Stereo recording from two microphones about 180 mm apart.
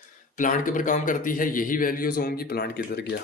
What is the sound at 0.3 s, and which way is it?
A man's voice, 45° left (ahead or behind).